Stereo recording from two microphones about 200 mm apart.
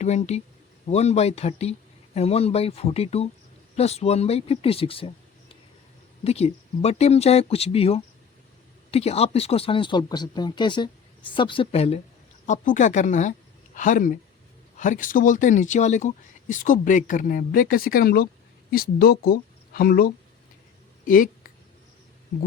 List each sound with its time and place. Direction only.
0.0 s speech: 35° left (ahead or behind)